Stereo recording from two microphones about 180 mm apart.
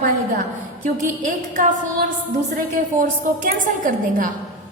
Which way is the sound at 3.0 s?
50° right (ahead or behind).